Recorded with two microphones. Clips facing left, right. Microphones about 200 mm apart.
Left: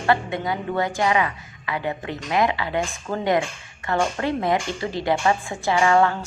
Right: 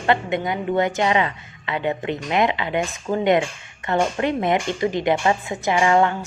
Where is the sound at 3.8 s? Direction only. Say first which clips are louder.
Right 2 dB; 20° right (ahead or behind).